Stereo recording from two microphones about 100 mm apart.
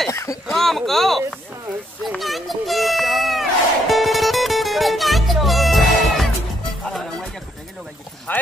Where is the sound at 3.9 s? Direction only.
Centre (ahead or behind).